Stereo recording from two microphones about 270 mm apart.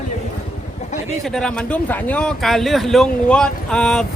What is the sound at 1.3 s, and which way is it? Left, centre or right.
Speech, centre.